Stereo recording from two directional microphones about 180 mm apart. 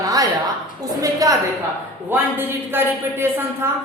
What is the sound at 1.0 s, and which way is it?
A woman's voice, 20° right (ahead or behind).